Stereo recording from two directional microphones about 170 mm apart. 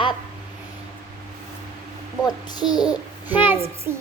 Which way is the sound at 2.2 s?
25° left (ahead or behind).